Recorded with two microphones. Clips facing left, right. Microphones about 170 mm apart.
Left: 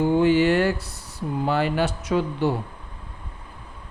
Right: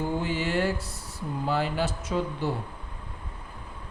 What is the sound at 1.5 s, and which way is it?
Speech, 70° left (ahead or behind).